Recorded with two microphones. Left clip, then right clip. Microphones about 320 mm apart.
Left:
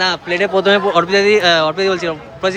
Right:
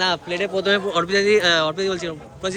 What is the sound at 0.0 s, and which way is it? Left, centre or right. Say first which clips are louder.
Speech: left 6 dB; centre.